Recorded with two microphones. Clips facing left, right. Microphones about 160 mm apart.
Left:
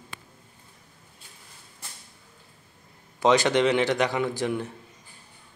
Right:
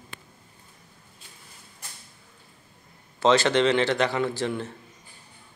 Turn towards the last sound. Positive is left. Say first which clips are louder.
# even
turn(degrees=15)  # may be behind; listen again after turning